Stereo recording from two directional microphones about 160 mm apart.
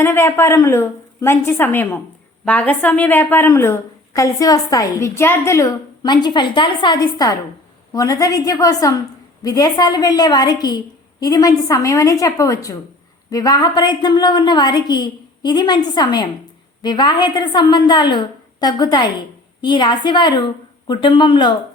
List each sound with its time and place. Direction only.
0.0 s a woman's voice: 15° left (ahead or behind)